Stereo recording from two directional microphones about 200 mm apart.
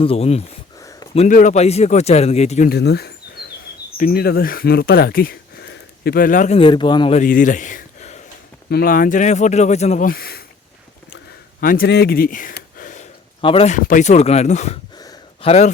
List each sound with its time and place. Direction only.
0.0 s speech: 30° left (ahead or behind)
0.8 s a sound: 15° left (ahead or behind)
1.1 s speech: 35° left (ahead or behind)
2.6 s speech: 55° left (ahead or behind)
6.6 s speech: 25° left (ahead or behind)
7.2 s speech: 40° left (ahead or behind)
10.1 s speech: 50° left (ahead or behind)
11.6 s speech: 45° left (ahead or behind)
13.4 s speech: 30° left (ahead or behind)
13.7 s speech: 40° left (ahead or behind)
14.9 s a sound: 20° left (ahead or behind)
15.4 s speech: 35° left (ahead or behind)